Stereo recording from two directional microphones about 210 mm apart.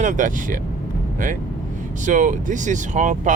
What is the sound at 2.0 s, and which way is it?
Speech, 35° right (ahead or behind).